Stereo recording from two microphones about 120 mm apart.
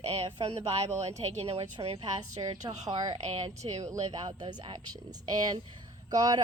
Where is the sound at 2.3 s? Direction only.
30° right (ahead or behind).